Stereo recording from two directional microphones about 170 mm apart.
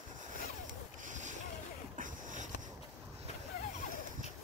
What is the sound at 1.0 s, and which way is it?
Boat, 45° right (ahead or behind).